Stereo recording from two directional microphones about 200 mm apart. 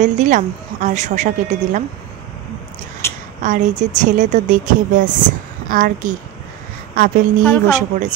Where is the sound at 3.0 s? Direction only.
15° left (ahead or behind).